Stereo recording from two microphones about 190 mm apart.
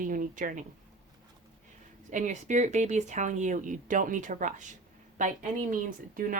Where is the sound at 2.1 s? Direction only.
40° right (ahead or behind).